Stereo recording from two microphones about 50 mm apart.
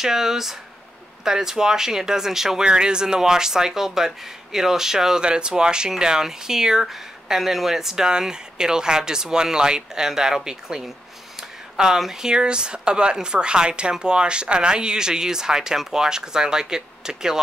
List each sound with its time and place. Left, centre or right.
0.0 s speech: centre